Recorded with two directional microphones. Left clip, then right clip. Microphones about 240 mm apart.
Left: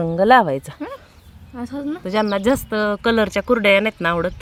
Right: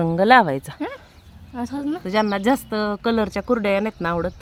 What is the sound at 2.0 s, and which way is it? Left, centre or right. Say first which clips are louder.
Speech: left 2 dB; centre.